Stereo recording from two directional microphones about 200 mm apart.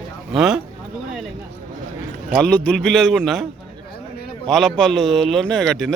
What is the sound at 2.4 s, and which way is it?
A man's voice, 5° left (ahead or behind).